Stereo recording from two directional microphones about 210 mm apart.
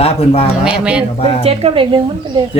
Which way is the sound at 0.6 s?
5° right (ahead or behind).